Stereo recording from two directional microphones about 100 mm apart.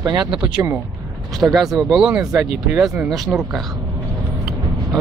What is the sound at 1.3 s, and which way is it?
Speech, 5° right (ahead or behind).